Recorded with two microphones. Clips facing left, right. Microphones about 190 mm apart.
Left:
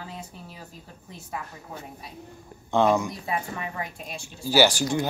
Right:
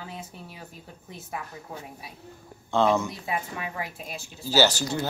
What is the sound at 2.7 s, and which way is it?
Speech, 15° left (ahead or behind).